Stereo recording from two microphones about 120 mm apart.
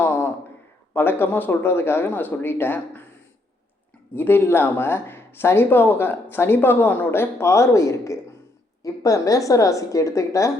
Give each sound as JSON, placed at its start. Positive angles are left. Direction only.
{"t": 0.0, "sound": "a sound", "side_deg": 20}
{"t": 0.9, "sound": "speech", "side_deg": 15}
{"t": 4.1, "sound": "speech", "side_deg": 15}